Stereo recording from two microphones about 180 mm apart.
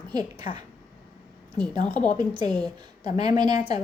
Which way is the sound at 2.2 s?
25° right (ahead or behind).